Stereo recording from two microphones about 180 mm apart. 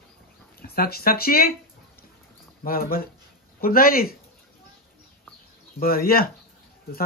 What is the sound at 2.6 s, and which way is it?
Speech, 55° left (ahead or behind).